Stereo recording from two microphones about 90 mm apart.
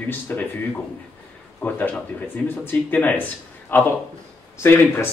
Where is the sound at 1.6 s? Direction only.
15° left (ahead or behind).